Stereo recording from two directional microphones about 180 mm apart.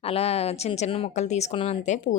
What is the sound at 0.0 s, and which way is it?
A woman's voice, 35° left (ahead or behind).